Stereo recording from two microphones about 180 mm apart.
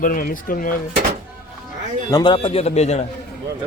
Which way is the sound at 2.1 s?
25° left (ahead or behind).